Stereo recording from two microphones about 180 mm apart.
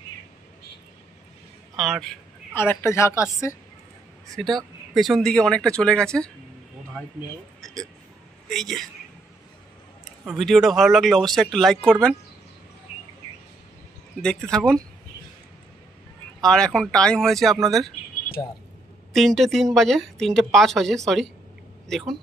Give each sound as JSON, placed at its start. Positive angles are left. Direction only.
{"t": 1.8, "sound": "speech", "side_deg": 0}
{"t": 2.5, "sound": "speech", "side_deg": 10}
{"t": 4.4, "sound": "speech", "side_deg": 0}
{"t": 8.5, "sound": "speech", "side_deg": 0}
{"t": 10.2, "sound": "speech", "side_deg": 0}
{"t": 14.2, "sound": "speech", "side_deg": 5}
{"t": 16.3, "sound": "speech", "side_deg": 5}
{"t": 18.4, "sound": "speech", "side_deg": 20}
{"t": 19.1, "sound": "speech", "side_deg": 0}